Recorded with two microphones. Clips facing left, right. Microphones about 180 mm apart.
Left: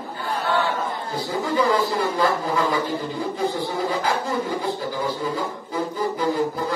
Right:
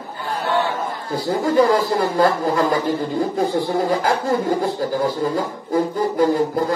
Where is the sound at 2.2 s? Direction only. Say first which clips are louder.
Right 5 dB; 50° right (ahead or behind).